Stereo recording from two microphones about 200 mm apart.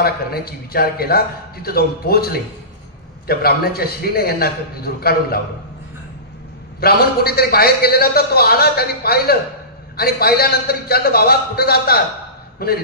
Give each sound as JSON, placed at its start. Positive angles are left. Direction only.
{"t": 0.0, "sound": "a man's voice", "side_deg": 50}
{"t": 6.8, "sound": "a man's voice", "side_deg": 50}